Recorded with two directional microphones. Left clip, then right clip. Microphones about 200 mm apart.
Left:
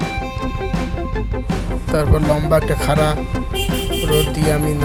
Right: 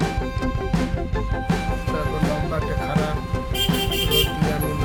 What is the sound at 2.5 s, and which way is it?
Music, 25° left (ahead or behind).